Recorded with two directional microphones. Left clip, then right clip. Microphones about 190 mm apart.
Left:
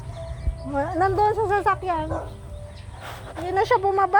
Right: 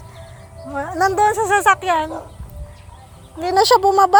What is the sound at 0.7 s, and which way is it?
Speech, 10° left (ahead or behind).